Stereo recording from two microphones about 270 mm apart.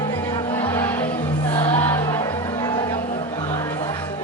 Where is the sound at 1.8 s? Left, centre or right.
Centre.